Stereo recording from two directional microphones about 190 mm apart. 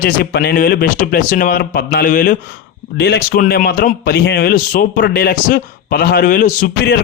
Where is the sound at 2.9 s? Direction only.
60° left (ahead or behind).